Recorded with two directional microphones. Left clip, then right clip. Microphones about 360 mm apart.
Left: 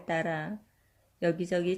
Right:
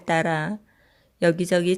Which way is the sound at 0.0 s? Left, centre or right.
Right.